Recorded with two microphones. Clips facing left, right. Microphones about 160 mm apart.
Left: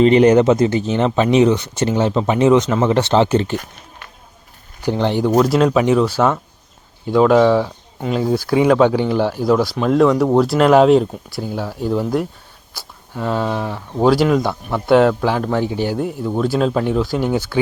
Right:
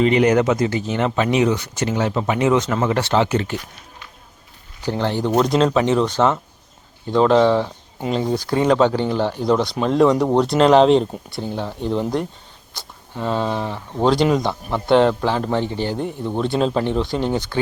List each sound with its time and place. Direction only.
0.0 s speech: 30° left (ahead or behind)
4.9 s speech: 15° left (ahead or behind)
12.7 s a sound: 5° left (ahead or behind)
13.4 s speech: 5° left (ahead or behind)